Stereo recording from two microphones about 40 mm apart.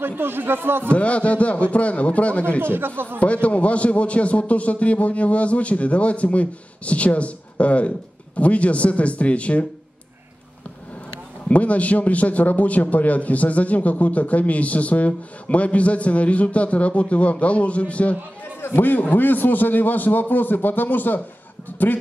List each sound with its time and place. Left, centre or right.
0.0 s speech: right
0.8 s a man's voice: left
2.6 s speech: right
3.2 s a man's voice: left
11.4 s a man's voice: left
18.8 s a man's voice: left